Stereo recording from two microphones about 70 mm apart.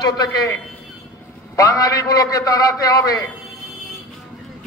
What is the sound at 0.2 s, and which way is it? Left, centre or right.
Speech, left.